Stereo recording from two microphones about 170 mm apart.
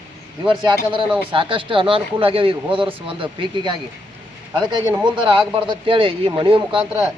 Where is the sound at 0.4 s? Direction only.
30° right (ahead or behind).